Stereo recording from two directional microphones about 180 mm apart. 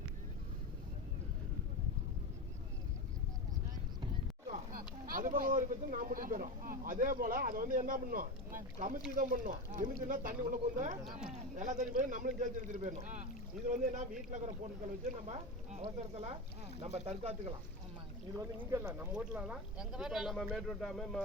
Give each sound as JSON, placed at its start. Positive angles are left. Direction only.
{"t": 4.7, "sound": "speech", "side_deg": -50}
{"t": 11.0, "sound": "speech", "side_deg": -5}
{"t": 11.5, "sound": "speech", "side_deg": -45}
{"t": 18.3, "sound": "speech", "side_deg": -15}